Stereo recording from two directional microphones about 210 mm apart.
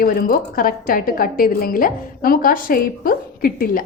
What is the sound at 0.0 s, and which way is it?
A woman's voice, 45° left (ahead or behind).